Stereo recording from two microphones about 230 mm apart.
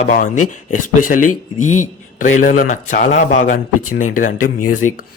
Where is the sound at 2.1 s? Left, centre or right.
Left.